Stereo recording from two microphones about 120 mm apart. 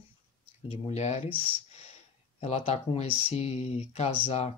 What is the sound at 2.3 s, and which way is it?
Speech, 60° left (ahead or behind).